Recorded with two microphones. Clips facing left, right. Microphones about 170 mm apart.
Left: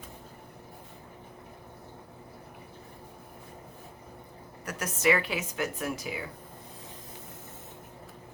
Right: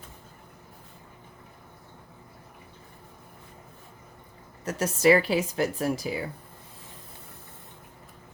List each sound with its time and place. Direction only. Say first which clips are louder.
4.6 s a woman's voice: right 6 dB; 25° right (ahead or behind)